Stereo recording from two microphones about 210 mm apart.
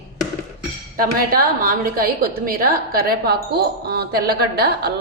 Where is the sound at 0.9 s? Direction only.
45° right (ahead or behind).